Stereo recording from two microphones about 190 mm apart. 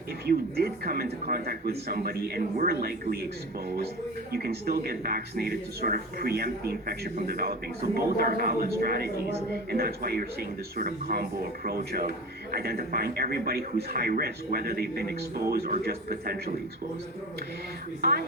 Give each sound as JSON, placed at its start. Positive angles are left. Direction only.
{"t": 0.3, "sound": "speech", "side_deg": -55}
{"t": 4.3, "sound": "speech", "side_deg": -55}